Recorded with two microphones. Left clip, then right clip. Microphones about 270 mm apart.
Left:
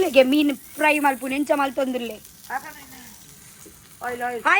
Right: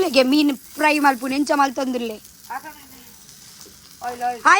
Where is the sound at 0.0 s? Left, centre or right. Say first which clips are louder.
Even; centre.